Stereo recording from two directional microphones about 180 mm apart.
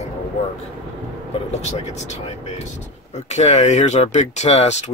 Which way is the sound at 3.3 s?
40° left (ahead or behind).